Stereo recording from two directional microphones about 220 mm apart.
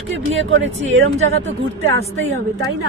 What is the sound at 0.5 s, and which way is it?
Speech, 60° right (ahead or behind).